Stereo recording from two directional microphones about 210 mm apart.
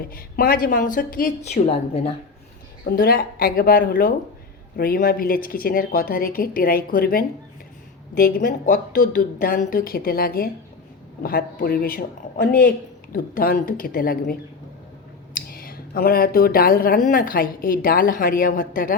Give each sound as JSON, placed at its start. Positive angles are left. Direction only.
{"t": 0.1, "sound": "a woman's voice", "side_deg": 45}
{"t": 2.8, "sound": "speech", "side_deg": 45}
{"t": 15.4, "sound": "speech", "side_deg": 45}